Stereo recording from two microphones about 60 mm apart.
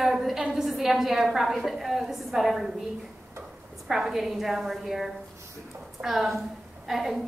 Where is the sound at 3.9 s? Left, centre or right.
Centre.